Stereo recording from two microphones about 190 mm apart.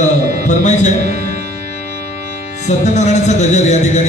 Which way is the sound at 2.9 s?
40° left (ahead or behind).